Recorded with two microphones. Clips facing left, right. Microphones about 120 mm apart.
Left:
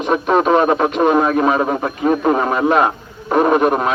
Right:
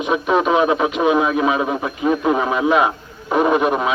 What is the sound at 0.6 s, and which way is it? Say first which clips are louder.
A man's voice: left 2 dB; 45° left (ahead or behind).